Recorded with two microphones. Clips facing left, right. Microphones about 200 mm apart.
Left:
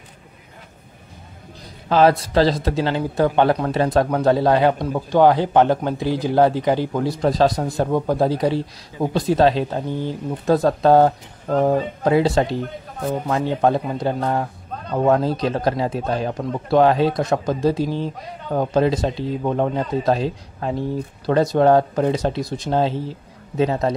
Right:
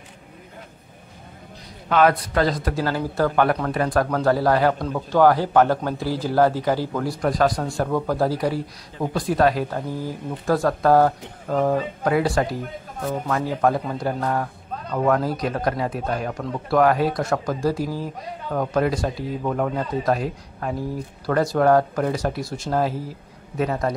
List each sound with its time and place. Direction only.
1.9 s a man's voice: 30° left (ahead or behind)